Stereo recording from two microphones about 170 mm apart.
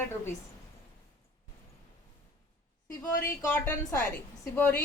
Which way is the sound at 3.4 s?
15° left (ahead or behind).